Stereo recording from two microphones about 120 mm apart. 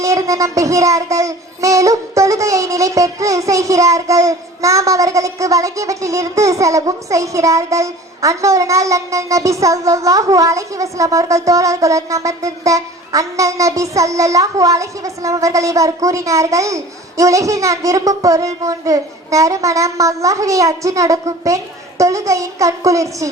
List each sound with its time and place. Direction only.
0.0 s speech: 25° right (ahead or behind)